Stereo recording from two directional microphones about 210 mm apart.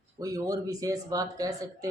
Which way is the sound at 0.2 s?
15° right (ahead or behind).